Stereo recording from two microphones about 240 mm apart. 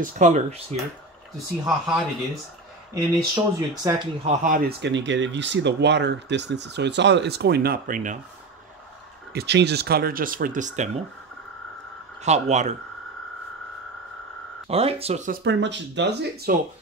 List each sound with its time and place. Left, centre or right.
0.0 s speech: right
1.7 s speech: centre
2.9 s speech: centre; by 8.2 s right
9.3 s speech: right
12.2 s speech: right
14.7 s speech: right
15.4 s speech: right